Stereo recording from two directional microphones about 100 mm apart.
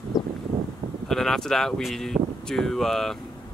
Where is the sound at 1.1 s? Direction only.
5° left (ahead or behind).